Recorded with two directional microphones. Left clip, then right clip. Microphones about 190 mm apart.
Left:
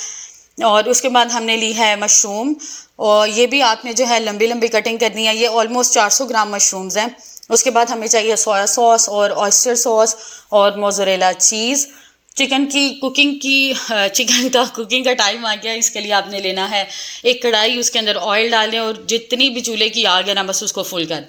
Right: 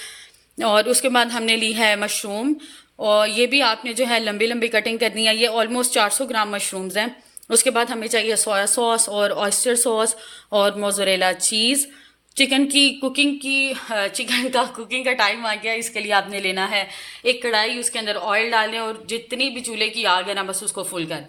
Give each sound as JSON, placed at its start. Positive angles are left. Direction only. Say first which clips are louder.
{"t": 0.6, "sound": "speech", "louder": "left 4 dB", "side_deg": -10}
{"t": 3.0, "sound": "speech", "louder": "left 5 dB", "side_deg": 10}
{"t": 3.3, "sound": "speech", "louder": "left 4 dB", "side_deg": -10}
{"t": 3.7, "sound": "a woman's voice", "louder": "left 5 dB", "side_deg": 0}
{"t": 4.0, "sound": "a woman's voice", "louder": "left 4 dB", "side_deg": -10}
{"t": 8.4, "sound": "speech", "louder": "left 7 dB", "side_deg": -20}
{"t": 13.4, "sound": "a woman's voice", "louder": "left 6 dB", "side_deg": 40}